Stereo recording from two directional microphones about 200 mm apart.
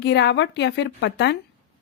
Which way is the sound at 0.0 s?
55° left (ahead or behind).